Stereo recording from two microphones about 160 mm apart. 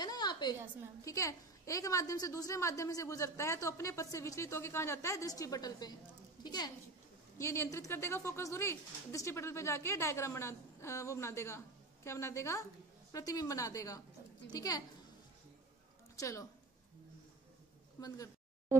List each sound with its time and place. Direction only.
0.0 s a sound: 25° left (ahead or behind)
1.0 s a woman's voice: 20° left (ahead or behind)
16.2 s a woman's voice: 20° left (ahead or behind)
18.0 s a woman's voice: 20° left (ahead or behind)